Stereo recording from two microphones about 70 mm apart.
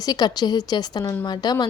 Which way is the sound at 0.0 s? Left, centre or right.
Left.